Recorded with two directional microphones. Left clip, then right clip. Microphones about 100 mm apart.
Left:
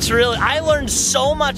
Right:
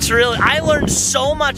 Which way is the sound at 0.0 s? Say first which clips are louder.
Right 2 dB; 5° right (ahead or behind).